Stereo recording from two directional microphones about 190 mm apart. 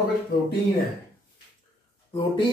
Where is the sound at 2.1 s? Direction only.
30° left (ahead or behind).